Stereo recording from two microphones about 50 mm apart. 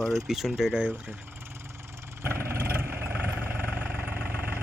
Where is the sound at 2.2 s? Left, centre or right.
Right.